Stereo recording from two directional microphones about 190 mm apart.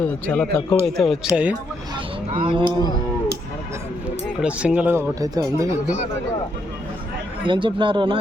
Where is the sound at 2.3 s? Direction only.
25° right (ahead or behind).